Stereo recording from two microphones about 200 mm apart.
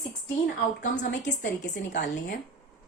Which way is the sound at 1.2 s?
60° left (ahead or behind).